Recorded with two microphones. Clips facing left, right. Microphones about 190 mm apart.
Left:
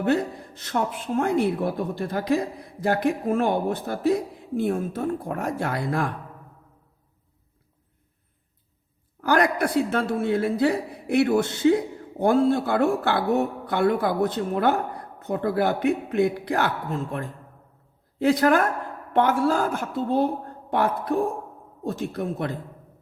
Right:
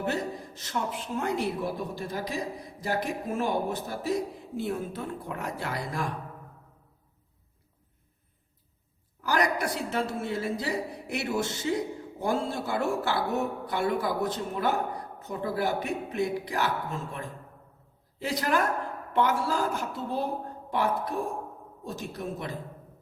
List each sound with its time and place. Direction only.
0.0 s a man's voice: 60° left (ahead or behind)
9.2 s a man's voice: 55° left (ahead or behind)
18.2 s a man's voice: 55° left (ahead or behind)